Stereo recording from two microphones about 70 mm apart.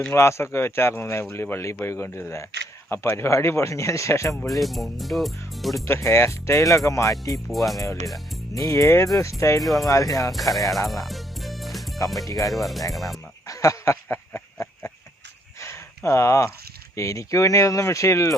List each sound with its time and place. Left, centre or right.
0.1 s speech: left
4.6 s speech: centre
5.8 s speech: left
7.3 s speech: centre
8.5 s speech: left
10.3 s speech: centre
10.7 s music: centre
12.3 s speech: left
12.5 s speech: centre
13.5 s a sound: left
16.9 s speech: left